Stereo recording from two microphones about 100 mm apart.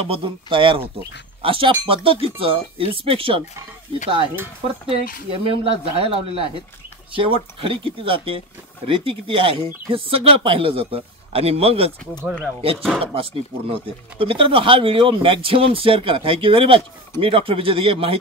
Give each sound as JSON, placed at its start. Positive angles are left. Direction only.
{"t": 0.0, "sound": "speech", "side_deg": -65}
{"t": 4.6, "sound": "speech", "side_deg": -70}
{"t": 13.0, "sound": "speech", "side_deg": -70}